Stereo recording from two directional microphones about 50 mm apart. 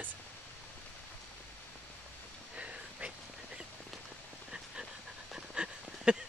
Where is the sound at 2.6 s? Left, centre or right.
Right.